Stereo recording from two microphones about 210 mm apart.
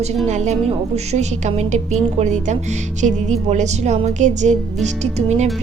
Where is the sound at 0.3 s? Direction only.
35° right (ahead or behind).